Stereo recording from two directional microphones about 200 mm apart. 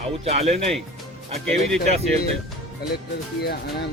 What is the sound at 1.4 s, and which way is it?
Speech, centre (ahead or behind).